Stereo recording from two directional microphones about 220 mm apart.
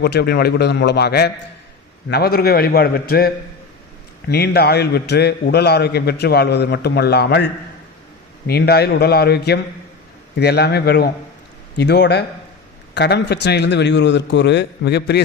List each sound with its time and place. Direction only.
0.0 s a man's voice: 50° left (ahead or behind)
8.4 s a man's voice: 45° left (ahead or behind)